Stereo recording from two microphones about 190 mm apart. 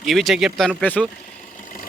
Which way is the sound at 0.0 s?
Centre (ahead or behind).